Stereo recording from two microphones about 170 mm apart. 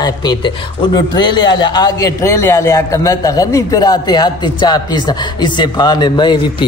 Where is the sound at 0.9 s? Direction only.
25° left (ahead or behind).